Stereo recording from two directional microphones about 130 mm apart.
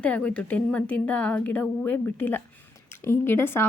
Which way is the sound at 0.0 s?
10° left (ahead or behind).